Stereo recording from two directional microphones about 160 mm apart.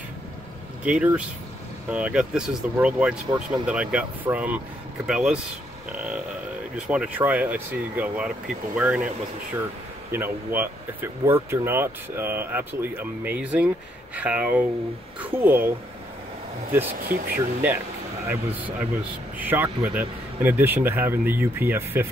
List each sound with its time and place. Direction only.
0.8 s speech: 5° right (ahead or behind)
10.1 s speech: 15° right (ahead or behind)
17.0 s speech: 70° right (ahead or behind)
17.6 s a sound: 10° right (ahead or behind)
19.3 s speech: 10° right (ahead or behind)